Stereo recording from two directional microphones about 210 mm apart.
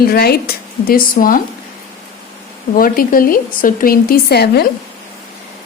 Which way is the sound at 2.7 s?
40° left (ahead or behind).